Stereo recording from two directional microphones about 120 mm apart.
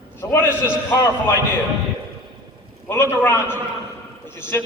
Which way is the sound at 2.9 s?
20° left (ahead or behind).